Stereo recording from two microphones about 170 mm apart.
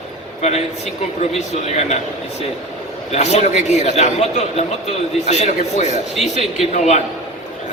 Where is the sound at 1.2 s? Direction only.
40° left (ahead or behind).